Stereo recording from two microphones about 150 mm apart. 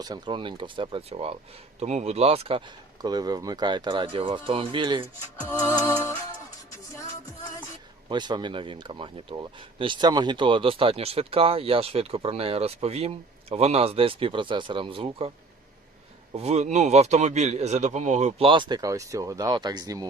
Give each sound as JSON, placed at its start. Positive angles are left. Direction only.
{"t": 0.0, "sound": "speech", "side_deg": -30}
{"t": 1.8, "sound": "speech", "side_deg": -50}
{"t": 5.8, "sound": "music", "side_deg": 15}
{"t": 8.1, "sound": "speech", "side_deg": -30}
{"t": 16.3, "sound": "a man's voice", "side_deg": -45}
{"t": 18.4, "sound": "speech", "side_deg": -30}